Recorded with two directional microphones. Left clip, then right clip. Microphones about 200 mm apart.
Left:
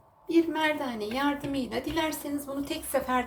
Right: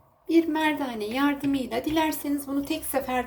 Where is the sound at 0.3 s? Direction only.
55° right (ahead or behind).